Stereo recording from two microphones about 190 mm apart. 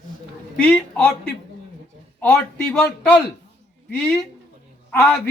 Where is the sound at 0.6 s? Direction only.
5° left (ahead or behind).